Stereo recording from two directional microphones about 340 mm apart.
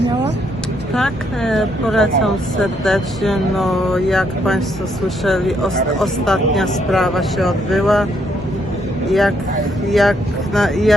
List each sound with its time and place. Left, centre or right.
0.9 s speech: centre
9.0 s speech: centre